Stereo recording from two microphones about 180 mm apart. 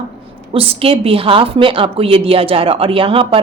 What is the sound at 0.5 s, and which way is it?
A woman's voice, 30° right (ahead or behind).